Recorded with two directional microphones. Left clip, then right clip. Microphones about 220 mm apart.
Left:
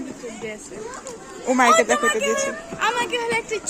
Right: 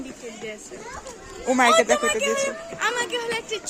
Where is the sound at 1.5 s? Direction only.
25° right (ahead or behind).